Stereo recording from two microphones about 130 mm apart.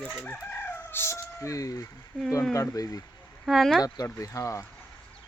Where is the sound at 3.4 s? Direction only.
Centre (ahead or behind).